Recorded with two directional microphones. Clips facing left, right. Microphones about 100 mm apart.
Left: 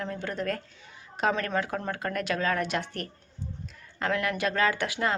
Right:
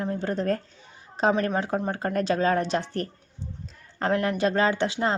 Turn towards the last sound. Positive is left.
turn(degrees=-30)  # may be behind; listen again after turning